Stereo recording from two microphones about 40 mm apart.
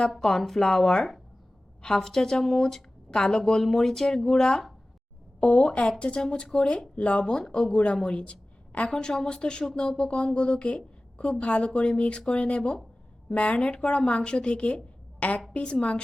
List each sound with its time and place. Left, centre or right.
0.2 s speech: centre
5.4 s a woman's voice: left
8.9 s a woman's voice: centre